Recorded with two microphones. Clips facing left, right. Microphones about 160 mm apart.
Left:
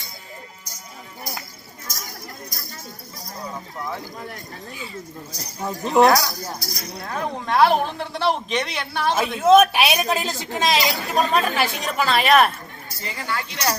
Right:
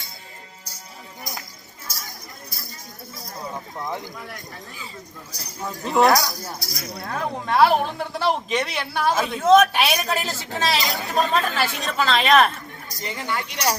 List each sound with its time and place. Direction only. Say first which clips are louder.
5.4 s speech: left 3 dB; 15° left (ahead or behind)
6.1 s speech: left 1 dB; centre (ahead or behind)
9.1 s speech: left 2 dB; 10° left (ahead or behind)
13.0 s speech: right 1 dB; 20° right (ahead or behind)